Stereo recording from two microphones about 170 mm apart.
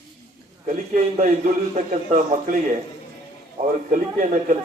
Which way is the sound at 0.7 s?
50° right (ahead or behind).